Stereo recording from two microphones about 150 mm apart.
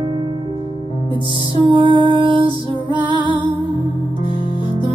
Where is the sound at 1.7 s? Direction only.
30° right (ahead or behind).